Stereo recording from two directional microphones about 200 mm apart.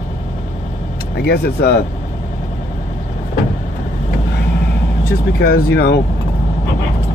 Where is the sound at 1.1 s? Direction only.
55° left (ahead or behind).